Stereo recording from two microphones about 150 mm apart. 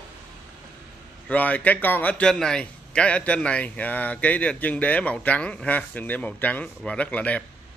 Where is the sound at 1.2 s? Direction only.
10° left (ahead or behind).